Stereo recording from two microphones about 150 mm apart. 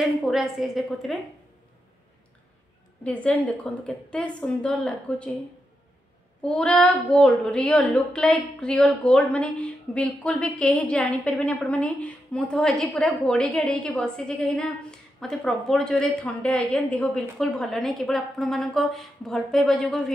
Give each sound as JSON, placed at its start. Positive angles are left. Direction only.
{"t": 0.0, "sound": "speech", "side_deg": 0}
{"t": 3.0, "sound": "a woman's voice", "side_deg": 10}
{"t": 6.4, "sound": "speech", "side_deg": 5}